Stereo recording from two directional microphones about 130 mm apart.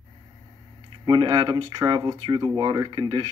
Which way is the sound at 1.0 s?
35° right (ahead or behind).